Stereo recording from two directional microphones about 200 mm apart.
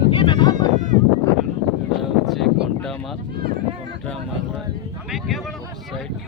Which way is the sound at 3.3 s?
55° right (ahead or behind).